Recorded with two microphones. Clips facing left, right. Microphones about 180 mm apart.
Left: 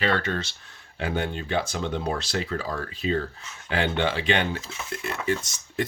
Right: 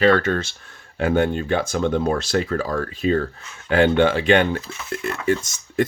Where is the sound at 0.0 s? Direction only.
45° right (ahead or behind).